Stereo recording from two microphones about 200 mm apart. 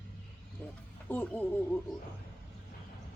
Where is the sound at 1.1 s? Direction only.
5° left (ahead or behind).